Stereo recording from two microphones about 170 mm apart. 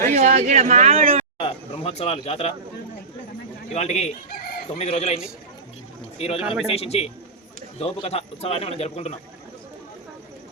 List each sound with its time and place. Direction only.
0.1 s speech: 40° right (ahead or behind)
1.4 s speech: 35° left (ahead or behind)
3.7 s speech: 40° left (ahead or behind)